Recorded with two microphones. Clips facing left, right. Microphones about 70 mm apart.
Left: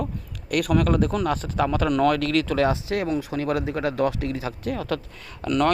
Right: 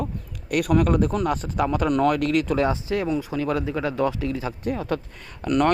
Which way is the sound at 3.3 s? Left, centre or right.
Left.